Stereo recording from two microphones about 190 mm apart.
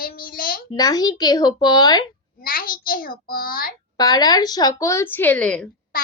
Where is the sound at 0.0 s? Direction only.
50° left (ahead or behind).